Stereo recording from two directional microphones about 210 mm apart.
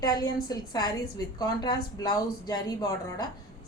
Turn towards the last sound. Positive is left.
turn(degrees=20)  # may be behind; listen again after turning